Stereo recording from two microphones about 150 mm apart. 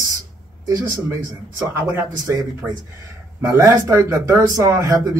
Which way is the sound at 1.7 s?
20° right (ahead or behind).